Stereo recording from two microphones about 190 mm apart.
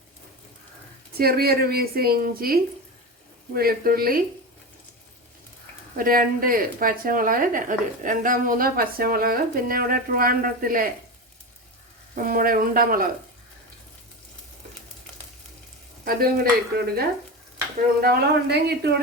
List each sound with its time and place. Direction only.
1.2 s a woman's voice: 55° right (ahead or behind)
6.0 s a woman's voice: 50° right (ahead or behind)
12.1 s a woman's voice: 50° right (ahead or behind)
16.0 s a woman's voice: 50° right (ahead or behind)
18.0 s speech: 55° right (ahead or behind)